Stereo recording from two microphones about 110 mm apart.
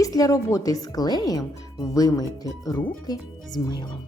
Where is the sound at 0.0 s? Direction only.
30° left (ahead or behind).